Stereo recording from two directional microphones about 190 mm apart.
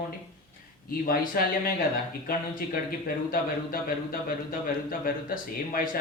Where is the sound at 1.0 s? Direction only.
50° left (ahead or behind).